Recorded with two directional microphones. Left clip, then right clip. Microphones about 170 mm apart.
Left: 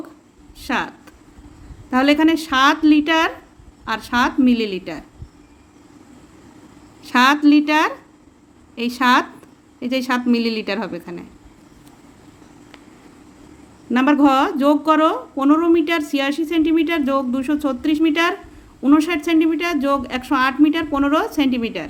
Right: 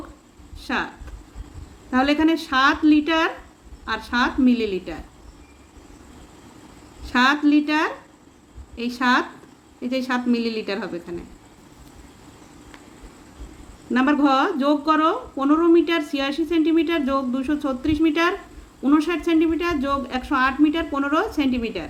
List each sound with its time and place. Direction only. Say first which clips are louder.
0.6 s speech: left 3 dB; 45° left (ahead or behind)
1.9 s speech: left 4 dB; 45° left (ahead or behind)
7.0 s speech: left 4 dB; 50° left (ahead or behind)
13.9 s speech: left 4 dB; 45° left (ahead or behind)